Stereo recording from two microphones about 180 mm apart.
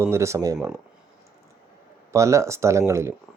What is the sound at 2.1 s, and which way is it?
Speech, 15° right (ahead or behind).